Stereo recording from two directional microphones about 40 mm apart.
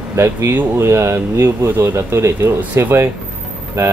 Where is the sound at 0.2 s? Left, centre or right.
Right.